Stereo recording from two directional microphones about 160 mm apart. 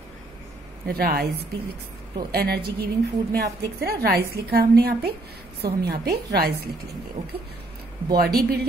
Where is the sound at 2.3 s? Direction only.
75° right (ahead or behind).